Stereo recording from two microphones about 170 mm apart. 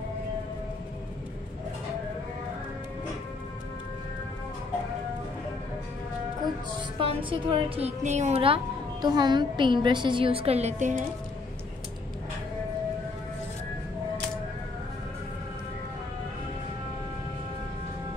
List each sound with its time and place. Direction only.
7.0 s speech: 30° right (ahead or behind)
9.0 s a woman's voice: 25° right (ahead or behind); by 11.1 s 45° right (ahead or behind)